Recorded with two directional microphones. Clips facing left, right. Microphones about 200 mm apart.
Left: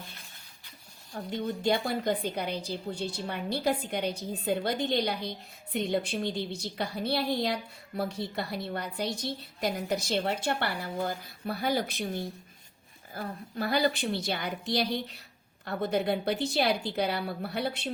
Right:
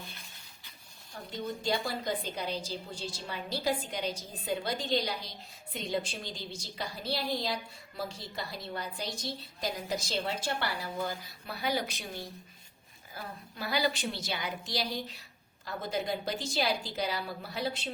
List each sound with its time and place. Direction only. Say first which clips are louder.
1.3 s a woman's voice: left 5 dB; 60° left (ahead or behind)